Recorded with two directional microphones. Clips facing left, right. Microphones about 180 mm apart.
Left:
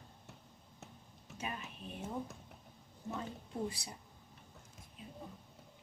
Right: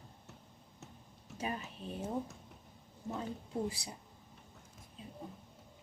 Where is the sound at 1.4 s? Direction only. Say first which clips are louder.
Right 4 dB; 35° right (ahead or behind).